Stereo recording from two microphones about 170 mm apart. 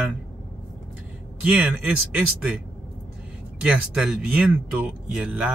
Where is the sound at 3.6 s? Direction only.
5° right (ahead or behind).